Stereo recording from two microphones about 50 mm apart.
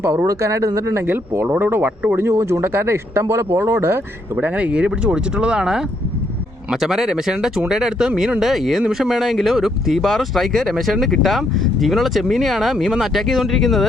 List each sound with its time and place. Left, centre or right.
0.0 s speech: right
1.0 s speech: right
2.1 s speech: right
4.4 s speech: right; by 8.4 s centre
8.4 s speech: centre